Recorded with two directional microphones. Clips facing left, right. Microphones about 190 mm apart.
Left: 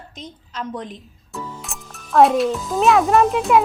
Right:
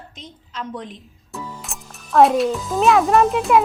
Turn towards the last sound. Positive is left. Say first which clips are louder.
# even
turn(degrees=0)  # may be behind; listen again after turning